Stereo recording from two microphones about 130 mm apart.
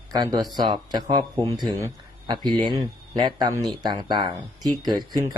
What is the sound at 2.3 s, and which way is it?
Speech, 35° right (ahead or behind).